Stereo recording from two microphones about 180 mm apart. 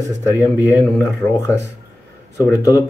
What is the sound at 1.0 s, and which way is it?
Speech, 15° left (ahead or behind).